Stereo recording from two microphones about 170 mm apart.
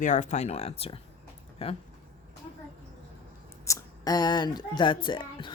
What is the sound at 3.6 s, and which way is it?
Speech, 20° left (ahead or behind).